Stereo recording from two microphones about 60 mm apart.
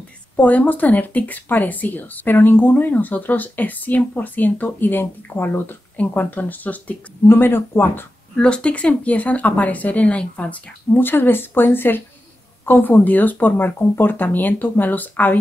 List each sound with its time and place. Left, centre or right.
0.4 s speech: left
7.2 s speech: left
8.4 s speech: centre
11.0 s speech: left